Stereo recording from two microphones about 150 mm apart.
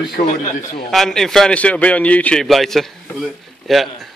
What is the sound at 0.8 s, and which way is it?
A man's voice, centre (ahead or behind).